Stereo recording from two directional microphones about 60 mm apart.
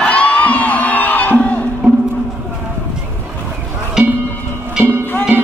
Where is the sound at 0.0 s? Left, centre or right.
Left.